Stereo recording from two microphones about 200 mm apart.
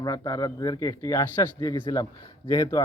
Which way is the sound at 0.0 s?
20° left (ahead or behind).